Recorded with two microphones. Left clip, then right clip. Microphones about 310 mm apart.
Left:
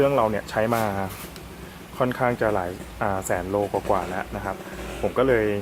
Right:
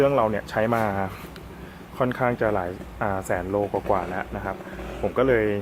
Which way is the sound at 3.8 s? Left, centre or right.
Centre.